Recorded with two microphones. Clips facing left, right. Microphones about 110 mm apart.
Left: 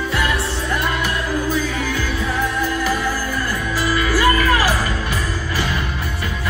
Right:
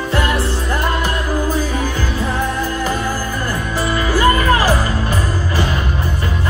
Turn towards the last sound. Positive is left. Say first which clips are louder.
# right 2 dB
turn(degrees=-25)  # may be behind; listen again after turning